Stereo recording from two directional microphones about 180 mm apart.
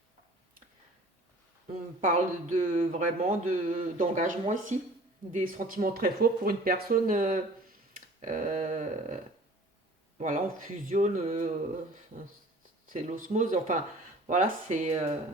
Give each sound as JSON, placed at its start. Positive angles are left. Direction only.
{"t": 1.7, "sound": "speech", "side_deg": -45}
{"t": 10.2, "sound": "speech", "side_deg": -45}
{"t": 12.8, "sound": "speech", "side_deg": -50}